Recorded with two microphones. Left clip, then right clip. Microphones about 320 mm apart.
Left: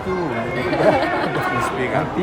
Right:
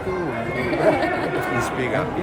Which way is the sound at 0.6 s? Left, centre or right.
Left.